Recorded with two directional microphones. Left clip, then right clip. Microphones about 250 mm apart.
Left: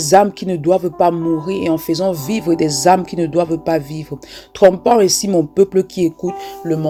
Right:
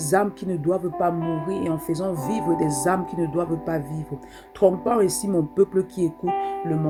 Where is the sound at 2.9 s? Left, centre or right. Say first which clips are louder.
Left 10 dB; centre.